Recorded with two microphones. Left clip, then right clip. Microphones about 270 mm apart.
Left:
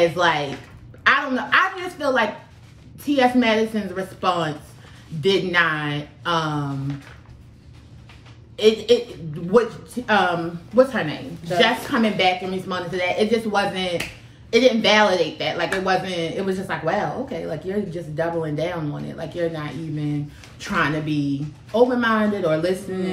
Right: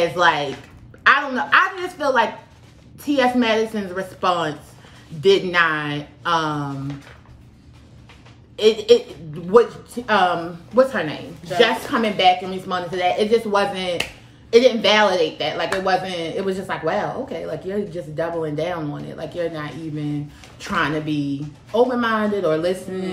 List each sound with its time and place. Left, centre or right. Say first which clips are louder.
0.0 s a woman's voice: right 1 dB; centre
8.5 s speech: right 2 dB; centre